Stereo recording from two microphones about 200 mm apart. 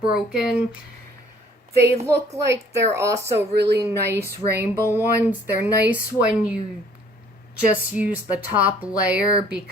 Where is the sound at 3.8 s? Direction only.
15° right (ahead or behind).